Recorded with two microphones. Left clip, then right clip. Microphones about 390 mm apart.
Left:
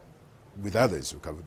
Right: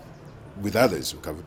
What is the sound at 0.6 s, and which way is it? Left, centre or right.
Speech, left.